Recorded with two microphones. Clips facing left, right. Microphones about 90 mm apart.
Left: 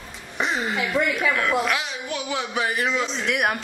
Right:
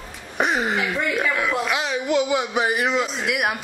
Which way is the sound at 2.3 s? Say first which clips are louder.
Right 4 dB; 15° right (ahead or behind).